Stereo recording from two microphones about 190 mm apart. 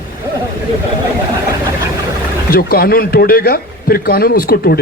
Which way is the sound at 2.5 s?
50° left (ahead or behind).